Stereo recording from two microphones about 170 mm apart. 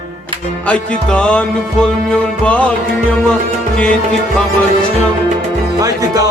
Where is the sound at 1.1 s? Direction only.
5° left (ahead or behind).